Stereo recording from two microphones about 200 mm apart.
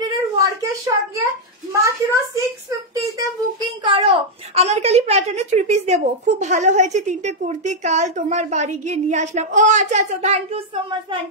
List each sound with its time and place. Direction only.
0.0 s a sound: 15° right (ahead or behind)
1.7 s a child's voice: 15° right (ahead or behind)
3.8 s a woman's voice: 25° right (ahead or behind)